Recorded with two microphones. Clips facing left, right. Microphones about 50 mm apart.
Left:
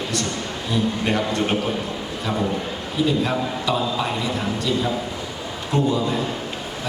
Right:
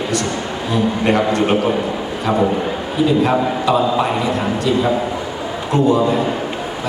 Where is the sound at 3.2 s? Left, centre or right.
Right.